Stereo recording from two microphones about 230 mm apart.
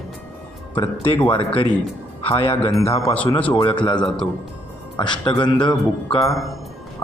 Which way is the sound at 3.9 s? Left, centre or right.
Centre.